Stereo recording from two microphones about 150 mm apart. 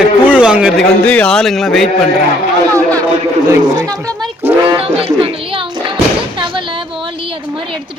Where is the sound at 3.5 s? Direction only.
25° right (ahead or behind).